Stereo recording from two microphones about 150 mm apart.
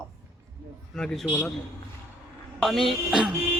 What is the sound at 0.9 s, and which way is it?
Speech, 5° left (ahead or behind).